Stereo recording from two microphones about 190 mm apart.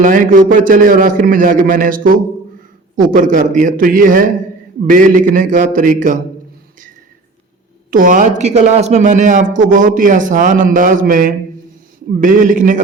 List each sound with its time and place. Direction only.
0.0 s a man's voice: 45° right (ahead or behind)
7.9 s a man's voice: 45° right (ahead or behind)